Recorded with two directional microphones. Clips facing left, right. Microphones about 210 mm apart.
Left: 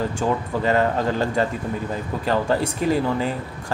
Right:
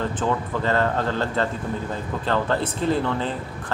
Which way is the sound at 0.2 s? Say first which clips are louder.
Left 2 dB; 15° left (ahead or behind).